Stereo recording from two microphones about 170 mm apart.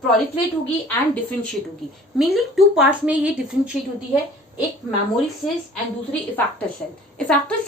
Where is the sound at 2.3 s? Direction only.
Centre (ahead or behind).